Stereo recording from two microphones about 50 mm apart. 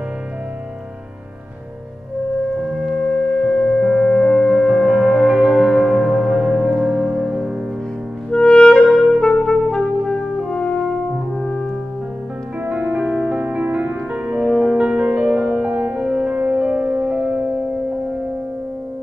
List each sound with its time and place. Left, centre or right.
3.4 s singing bowl: centre
3.8 s music: centre
5.3 s music: centre
8.3 s music: centre
10.9 s french horn: centre
12.6 s music: centre
13.4 s music: right
14.4 s music: centre
14.8 s music: right
16.1 s music: centre
16.3 s music: right